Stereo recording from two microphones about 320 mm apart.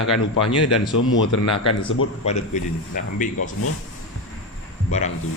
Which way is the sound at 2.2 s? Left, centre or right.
Left.